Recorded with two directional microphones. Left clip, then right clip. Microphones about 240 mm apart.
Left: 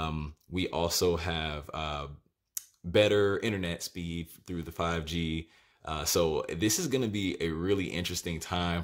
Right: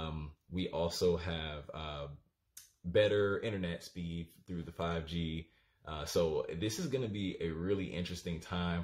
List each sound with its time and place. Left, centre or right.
0.0 s speech: left